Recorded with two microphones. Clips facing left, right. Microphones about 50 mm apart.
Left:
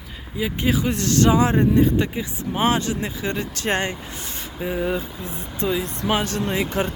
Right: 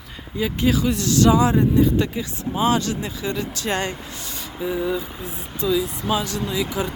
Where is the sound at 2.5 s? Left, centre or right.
Left.